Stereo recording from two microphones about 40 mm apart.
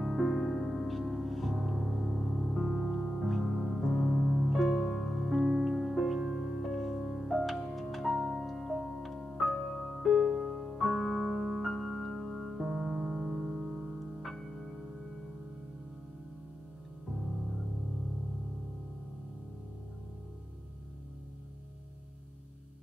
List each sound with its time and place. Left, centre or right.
0.0 s music: centre
6.1 s music: centre
6.6 s music: centre
13.5 s music: centre